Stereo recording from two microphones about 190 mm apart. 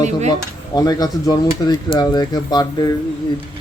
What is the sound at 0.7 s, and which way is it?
Speech, 20° left (ahead or behind).